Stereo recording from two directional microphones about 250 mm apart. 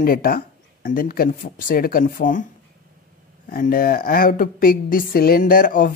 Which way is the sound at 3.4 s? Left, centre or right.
Left.